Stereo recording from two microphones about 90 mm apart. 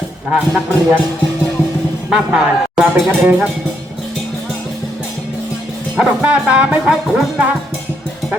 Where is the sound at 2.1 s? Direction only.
Centre (ahead or behind).